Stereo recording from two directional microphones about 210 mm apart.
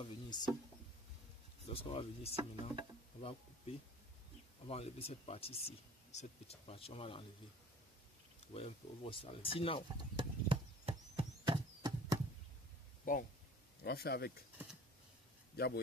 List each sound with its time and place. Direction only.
0.0 s speech: 20° left (ahead or behind)
1.7 s speech: 25° left (ahead or behind)
4.6 s speech: 30° left (ahead or behind)
8.5 s speech: 25° left (ahead or behind)
10.1 s a sound: 25° right (ahead or behind)
13.1 s speech: 40° left (ahead or behind)
15.5 s speech: 50° left (ahead or behind)